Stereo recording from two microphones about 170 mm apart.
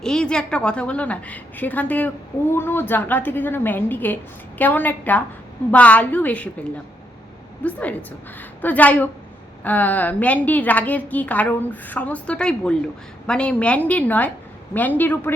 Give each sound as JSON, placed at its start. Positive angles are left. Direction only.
{"t": 0.0, "sound": "a woman's voice", "side_deg": 5}
{"t": 7.6, "sound": "a woman's voice", "side_deg": 10}